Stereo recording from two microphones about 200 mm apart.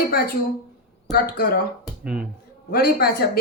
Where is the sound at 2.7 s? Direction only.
45° left (ahead or behind).